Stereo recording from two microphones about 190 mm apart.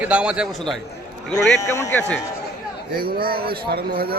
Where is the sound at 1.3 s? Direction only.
15° left (ahead or behind).